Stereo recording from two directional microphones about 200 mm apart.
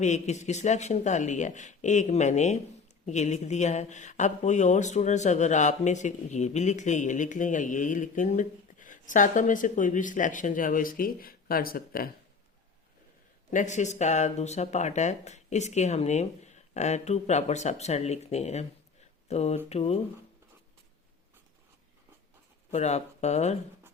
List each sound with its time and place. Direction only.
0.0 s speech: 35° left (ahead or behind)
13.5 s speech: 40° left (ahead or behind)
22.7 s speech: 35° left (ahead or behind)